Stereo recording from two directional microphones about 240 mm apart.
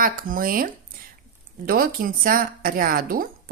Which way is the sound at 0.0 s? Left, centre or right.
Right.